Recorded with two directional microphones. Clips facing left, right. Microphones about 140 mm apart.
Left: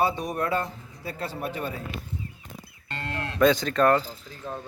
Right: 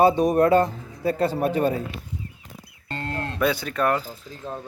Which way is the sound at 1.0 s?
50° right (ahead or behind).